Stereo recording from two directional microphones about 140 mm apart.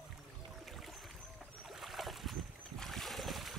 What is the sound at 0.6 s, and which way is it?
Boat, centre (ahead or behind).